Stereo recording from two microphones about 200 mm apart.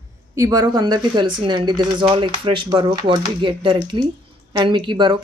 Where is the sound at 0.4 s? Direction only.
15° right (ahead or behind).